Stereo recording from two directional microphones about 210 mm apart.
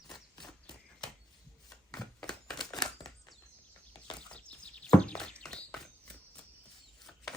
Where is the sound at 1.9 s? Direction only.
Centre (ahead or behind).